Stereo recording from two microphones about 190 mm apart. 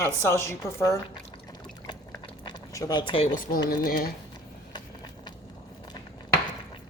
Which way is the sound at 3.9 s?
50° left (ahead or behind).